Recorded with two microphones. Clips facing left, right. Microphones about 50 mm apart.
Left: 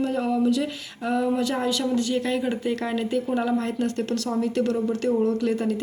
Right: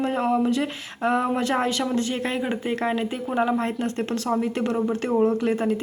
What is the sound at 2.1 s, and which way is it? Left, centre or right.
Speech, right.